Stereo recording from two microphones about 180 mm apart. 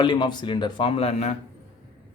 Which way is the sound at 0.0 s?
25° left (ahead or behind).